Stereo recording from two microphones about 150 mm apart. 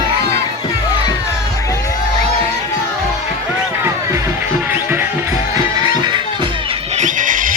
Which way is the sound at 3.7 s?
15° right (ahead or behind).